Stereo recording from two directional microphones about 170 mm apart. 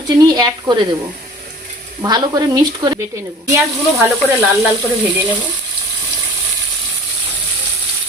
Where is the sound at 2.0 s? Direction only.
25° right (ahead or behind).